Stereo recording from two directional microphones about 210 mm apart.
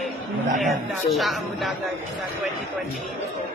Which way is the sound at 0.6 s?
Centre (ahead or behind).